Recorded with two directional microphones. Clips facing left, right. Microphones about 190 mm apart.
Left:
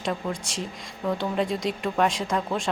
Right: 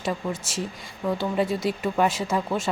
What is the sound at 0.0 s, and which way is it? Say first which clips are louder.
A woman's voice: right 1 dB; 5° right (ahead or behind).